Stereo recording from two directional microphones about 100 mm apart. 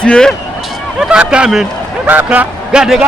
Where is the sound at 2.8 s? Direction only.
5° right (ahead or behind).